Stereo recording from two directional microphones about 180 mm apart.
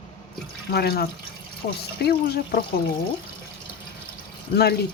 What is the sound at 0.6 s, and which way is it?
A woman's voice, 60° left (ahead or behind).